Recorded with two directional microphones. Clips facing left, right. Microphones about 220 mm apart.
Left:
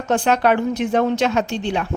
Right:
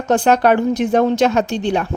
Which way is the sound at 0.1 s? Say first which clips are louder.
Right 4 dB; 45° right (ahead or behind).